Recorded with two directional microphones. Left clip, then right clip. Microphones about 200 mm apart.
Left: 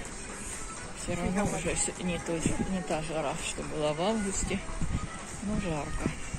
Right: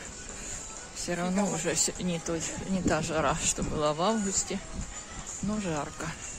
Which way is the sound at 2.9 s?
50° right (ahead or behind).